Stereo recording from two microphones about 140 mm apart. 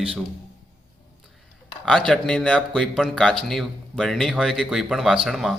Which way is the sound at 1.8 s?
5° left (ahead or behind).